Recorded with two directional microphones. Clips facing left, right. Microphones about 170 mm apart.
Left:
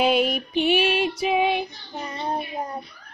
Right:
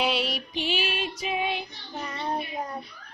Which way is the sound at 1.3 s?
60° left (ahead or behind).